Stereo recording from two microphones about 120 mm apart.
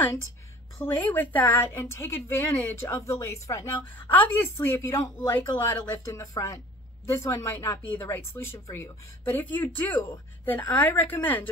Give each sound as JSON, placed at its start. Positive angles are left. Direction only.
{"t": 1.0, "sound": "a woman's voice", "side_deg": 15}
{"t": 3.8, "sound": "a woman's voice", "side_deg": 15}